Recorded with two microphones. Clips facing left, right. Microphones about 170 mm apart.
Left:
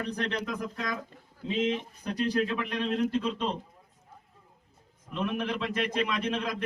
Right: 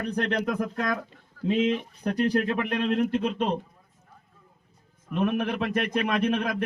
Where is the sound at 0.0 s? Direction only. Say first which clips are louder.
Right 5 dB; 55° right (ahead or behind).